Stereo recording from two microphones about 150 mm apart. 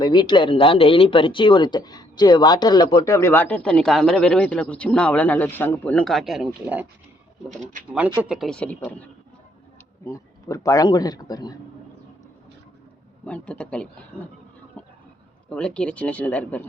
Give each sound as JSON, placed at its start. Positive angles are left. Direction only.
{"t": 0.0, "sound": "speech", "side_deg": 30}
{"t": 8.2, "sound": "speech", "side_deg": -5}
{"t": 10.0, "sound": "a man's voice", "side_deg": 20}
{"t": 13.2, "sound": "speech", "side_deg": 10}
{"t": 15.4, "sound": "speech", "side_deg": 5}